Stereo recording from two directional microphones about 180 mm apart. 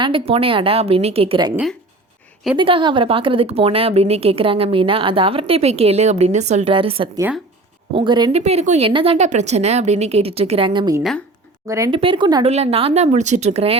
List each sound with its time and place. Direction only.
0.0 s a woman's voice: 30° right (ahead or behind)
2.6 s a woman's voice: 30° right (ahead or behind)
8.4 s a woman's voice: 35° right (ahead or behind)